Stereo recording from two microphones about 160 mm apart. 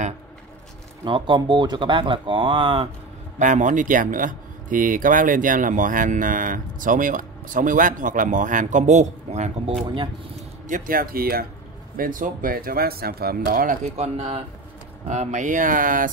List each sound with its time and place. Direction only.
1.0 s speech: 30° right (ahead or behind)
3.3 s speech: 50° right (ahead or behind)
10.7 s speech: 65° right (ahead or behind)
12.0 s speech: 55° right (ahead or behind)
13.9 s speech: 40° right (ahead or behind); by 16.1 s 60° right (ahead or behind)